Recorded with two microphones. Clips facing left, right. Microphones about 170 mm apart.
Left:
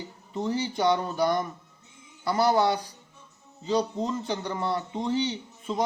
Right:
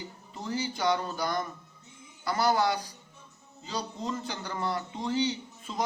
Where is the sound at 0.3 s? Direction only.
25° left (ahead or behind).